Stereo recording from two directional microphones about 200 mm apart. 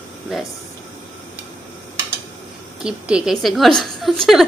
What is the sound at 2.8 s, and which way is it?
A woman's voice, 5° right (ahead or behind).